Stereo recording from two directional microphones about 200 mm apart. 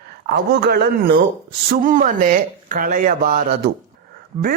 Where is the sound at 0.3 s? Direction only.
55° right (ahead or behind).